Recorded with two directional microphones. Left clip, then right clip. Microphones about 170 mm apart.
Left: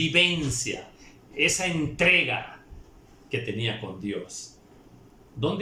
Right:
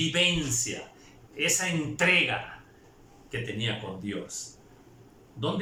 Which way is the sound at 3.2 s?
15° left (ahead or behind).